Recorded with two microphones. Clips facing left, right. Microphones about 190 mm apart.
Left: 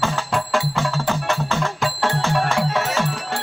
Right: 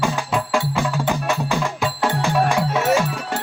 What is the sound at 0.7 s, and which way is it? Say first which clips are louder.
Music: right 1 dB; 15° right (ahead or behind).